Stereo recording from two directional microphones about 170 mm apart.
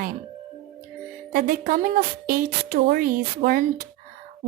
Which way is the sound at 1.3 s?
60° right (ahead or behind).